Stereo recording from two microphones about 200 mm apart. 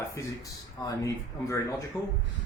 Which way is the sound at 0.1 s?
15° left (ahead or behind).